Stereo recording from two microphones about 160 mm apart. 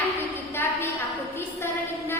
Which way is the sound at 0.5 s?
15° left (ahead or behind).